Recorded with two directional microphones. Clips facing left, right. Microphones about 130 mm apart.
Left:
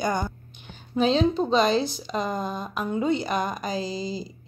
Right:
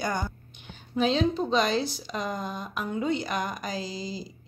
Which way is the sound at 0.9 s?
30° left (ahead or behind).